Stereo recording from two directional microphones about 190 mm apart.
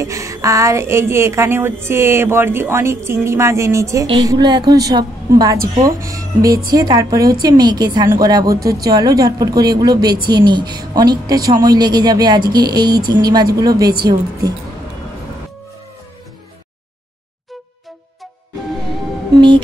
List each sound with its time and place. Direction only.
0.0 s music: 15° right (ahead or behind)
6.7 s a woman's voice: 20° right (ahead or behind)